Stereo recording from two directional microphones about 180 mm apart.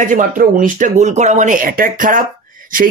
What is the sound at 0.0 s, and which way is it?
Speech, 50° right (ahead or behind).